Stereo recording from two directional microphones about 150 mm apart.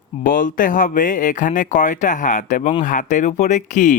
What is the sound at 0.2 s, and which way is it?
Speech, 65° left (ahead or behind).